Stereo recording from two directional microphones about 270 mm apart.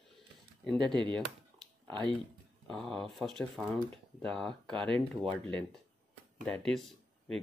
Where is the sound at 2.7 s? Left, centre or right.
Centre.